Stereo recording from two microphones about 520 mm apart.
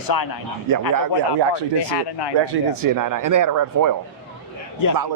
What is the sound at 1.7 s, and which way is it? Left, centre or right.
Speech, left.